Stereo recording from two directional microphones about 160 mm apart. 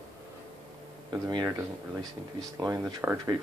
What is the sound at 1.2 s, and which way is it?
Speech, 25° right (ahead or behind).